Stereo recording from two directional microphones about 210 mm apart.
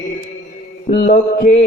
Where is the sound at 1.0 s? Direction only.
40° left (ahead or behind).